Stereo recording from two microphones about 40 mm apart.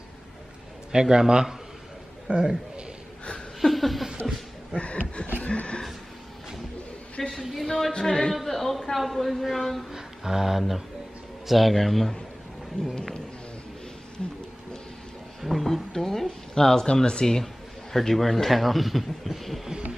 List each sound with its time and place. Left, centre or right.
0.9 s a man's voice: centre
2.3 s a man's voice: right
3.6 s laughter: centre
4.7 s a sound: left
7.2 s a man's voice: centre
9.9 s music: centre
11.4 s a man's voice: centre
12.9 s a man's voice: centre
15.4 s speech: centre; by 17.4 s left
17.9 s a man's voice: centre